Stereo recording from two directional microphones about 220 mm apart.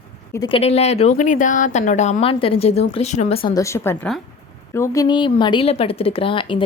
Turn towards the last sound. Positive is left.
turn(degrees=25)  # may be behind; listen again after turning